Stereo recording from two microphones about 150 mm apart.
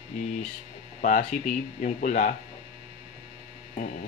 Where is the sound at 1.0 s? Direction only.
55° left (ahead or behind).